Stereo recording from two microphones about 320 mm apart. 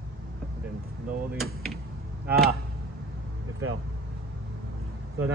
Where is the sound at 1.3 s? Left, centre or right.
Centre.